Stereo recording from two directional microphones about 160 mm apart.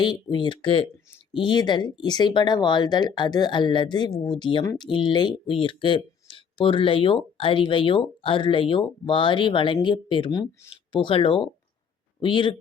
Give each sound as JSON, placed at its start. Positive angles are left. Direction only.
{"t": 0.0, "sound": "speech", "side_deg": 30}
{"t": 4.6, "sound": "speech", "side_deg": 20}
{"t": 4.9, "sound": "speech", "side_deg": 30}